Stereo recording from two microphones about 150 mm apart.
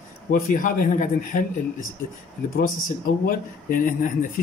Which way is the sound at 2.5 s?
70° left (ahead or behind).